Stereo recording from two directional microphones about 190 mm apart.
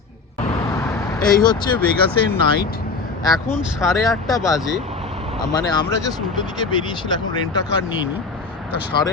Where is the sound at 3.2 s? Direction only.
20° left (ahead or behind).